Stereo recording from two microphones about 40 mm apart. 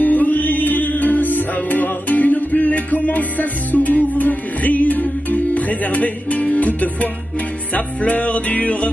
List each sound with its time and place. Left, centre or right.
0.0 s music: left